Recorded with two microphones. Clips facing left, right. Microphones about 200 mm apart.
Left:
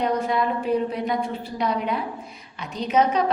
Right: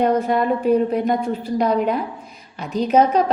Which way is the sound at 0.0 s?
45° right (ahead or behind).